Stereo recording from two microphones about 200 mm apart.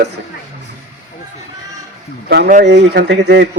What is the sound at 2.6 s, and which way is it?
Speech, 55° right (ahead or behind).